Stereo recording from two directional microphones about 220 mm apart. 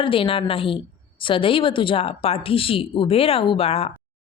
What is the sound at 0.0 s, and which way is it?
A woman's voice, 25° left (ahead or behind).